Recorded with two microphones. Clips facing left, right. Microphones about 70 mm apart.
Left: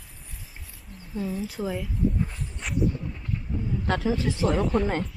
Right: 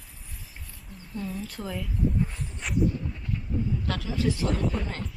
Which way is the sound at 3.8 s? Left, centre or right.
Left.